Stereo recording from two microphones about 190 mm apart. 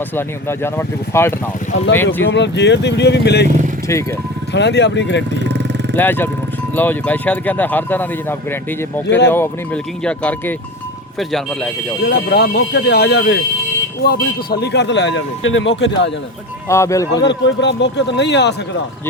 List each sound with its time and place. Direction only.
0.2 s speech: 10° left (ahead or behind)
2.3 s speech: 65° left (ahead or behind)
4.5 s speech: 65° left (ahead or behind)
5.4 s vehicle: 65° right (ahead or behind)
5.9 s speech: 10° left (ahead or behind)
9.0 s speech: 70° left (ahead or behind)
9.3 s speech: 10° left (ahead or behind)
12.0 s speech: 60° left (ahead or behind)
16.6 s speech: 15° left (ahead or behind)
17.2 s speech: 70° left (ahead or behind)